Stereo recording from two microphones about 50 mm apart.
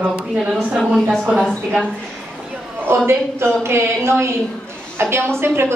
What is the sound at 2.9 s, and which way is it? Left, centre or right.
A woman's voice, right.